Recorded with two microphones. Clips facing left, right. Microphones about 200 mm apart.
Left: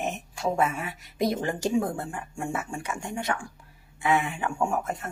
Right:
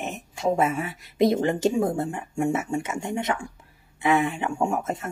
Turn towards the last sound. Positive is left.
turn(degrees=-20)  # may be behind; listen again after turning